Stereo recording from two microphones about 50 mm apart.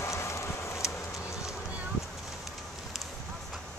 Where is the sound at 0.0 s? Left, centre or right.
Left.